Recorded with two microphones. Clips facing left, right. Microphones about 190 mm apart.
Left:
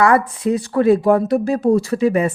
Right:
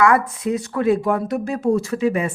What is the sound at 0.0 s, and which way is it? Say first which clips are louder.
A woman's voice: left 2 dB; 35° left (ahead or behind).